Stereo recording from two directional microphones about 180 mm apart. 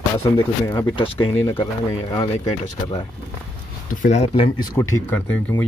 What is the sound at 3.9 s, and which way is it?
Speech, 45° left (ahead or behind).